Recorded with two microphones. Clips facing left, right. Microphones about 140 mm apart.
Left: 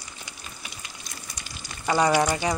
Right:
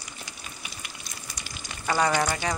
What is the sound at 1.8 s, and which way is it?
Frying, 15° left (ahead or behind).